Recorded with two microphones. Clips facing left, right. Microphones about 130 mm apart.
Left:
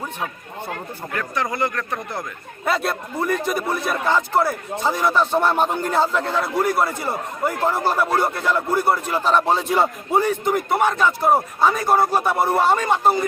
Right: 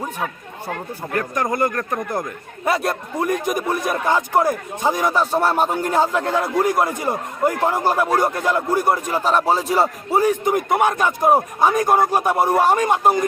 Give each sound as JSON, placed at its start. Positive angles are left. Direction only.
{"t": 1.4, "sound": "a man's voice", "side_deg": -45}
{"t": 2.6, "sound": "a man's voice", "side_deg": -15}